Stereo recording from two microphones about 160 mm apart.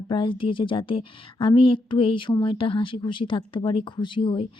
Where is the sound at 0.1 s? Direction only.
30° left (ahead or behind).